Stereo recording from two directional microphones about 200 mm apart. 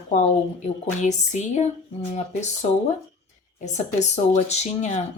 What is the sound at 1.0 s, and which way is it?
A woman's voice, 35° left (ahead or behind).